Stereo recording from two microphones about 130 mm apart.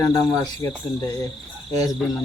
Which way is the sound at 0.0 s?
25° left (ahead or behind).